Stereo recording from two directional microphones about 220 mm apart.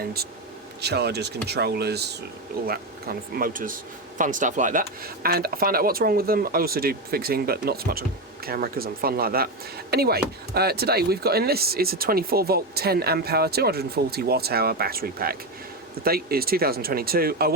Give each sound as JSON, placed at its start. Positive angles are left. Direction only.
{"t": 0.0, "sound": "speech", "side_deg": -45}